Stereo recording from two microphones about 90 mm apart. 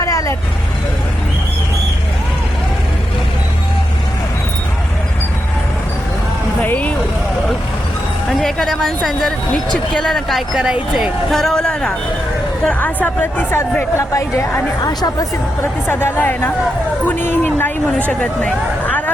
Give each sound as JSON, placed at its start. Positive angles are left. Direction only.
{"t": 0.0, "sound": "vehicle", "side_deg": 35}
{"t": 6.7, "sound": "vehicle", "side_deg": 15}
{"t": 8.4, "sound": "speech", "side_deg": 5}
{"t": 9.9, "sound": "a woman's voice", "side_deg": 5}
{"t": 13.6, "sound": "speech", "side_deg": 30}
{"t": 15.6, "sound": "a woman's voice", "side_deg": 25}